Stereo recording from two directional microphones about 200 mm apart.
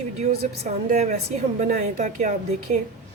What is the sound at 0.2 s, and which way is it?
A woman's voice, 35° right (ahead or behind).